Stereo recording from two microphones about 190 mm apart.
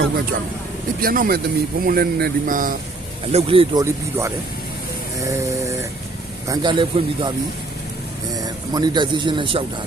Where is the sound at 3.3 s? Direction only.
30° right (ahead or behind).